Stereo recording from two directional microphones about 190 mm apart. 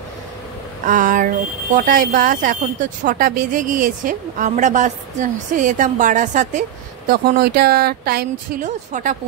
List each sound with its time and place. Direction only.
0.8 s a sound: 45° right (ahead or behind)
1.8 s speech: 45° right (ahead or behind)
7.1 s speech: 60° right (ahead or behind)
8.6 s speech: 40° right (ahead or behind)